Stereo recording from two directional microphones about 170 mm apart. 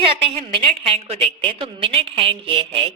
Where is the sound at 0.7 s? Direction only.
35° right (ahead or behind).